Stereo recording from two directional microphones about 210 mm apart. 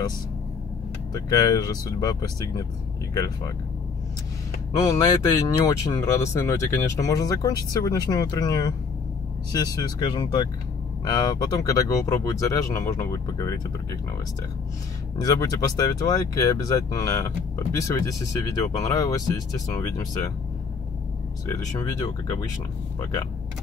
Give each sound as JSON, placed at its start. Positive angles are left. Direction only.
{"t": 1.1, "sound": "speech", "side_deg": 15}
{"t": 4.7, "sound": "speech", "side_deg": 15}
{"t": 15.2, "sound": "speech", "side_deg": 15}
{"t": 21.5, "sound": "speech", "side_deg": 15}